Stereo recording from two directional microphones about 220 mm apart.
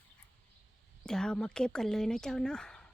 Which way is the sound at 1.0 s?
5° left (ahead or behind).